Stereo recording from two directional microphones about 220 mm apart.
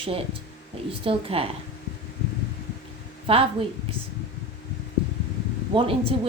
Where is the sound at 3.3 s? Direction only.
25° right (ahead or behind).